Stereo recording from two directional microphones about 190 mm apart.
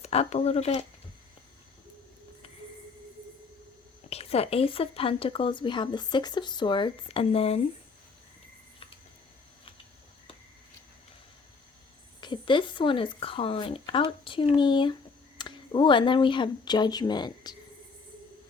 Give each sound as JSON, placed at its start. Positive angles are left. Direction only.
{"t": 0.0, "sound": "speech", "side_deg": 35}
{"t": 4.1, "sound": "a woman's voice", "side_deg": 30}
{"t": 12.2, "sound": "a woman's voice", "side_deg": 25}